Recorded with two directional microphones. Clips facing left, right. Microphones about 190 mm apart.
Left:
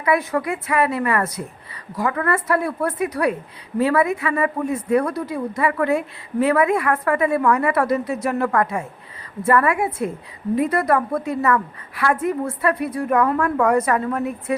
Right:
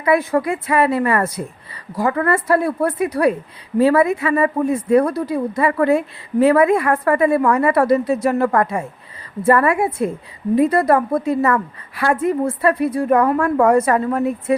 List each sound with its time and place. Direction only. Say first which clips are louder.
0.0 s a woman's voice: right 4 dB; 30° right (ahead or behind)